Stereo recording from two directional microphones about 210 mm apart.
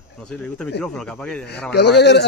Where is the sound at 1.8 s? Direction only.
55° left (ahead or behind).